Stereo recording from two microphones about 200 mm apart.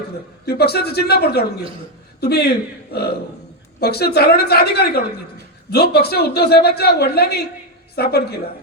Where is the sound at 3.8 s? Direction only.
55° left (ahead or behind).